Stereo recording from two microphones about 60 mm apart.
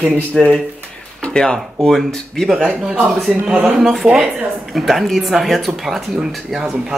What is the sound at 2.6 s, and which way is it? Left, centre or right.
Speech, centre.